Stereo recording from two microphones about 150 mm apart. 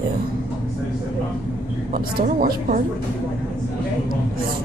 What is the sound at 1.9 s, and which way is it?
Speech, 65° right (ahead or behind).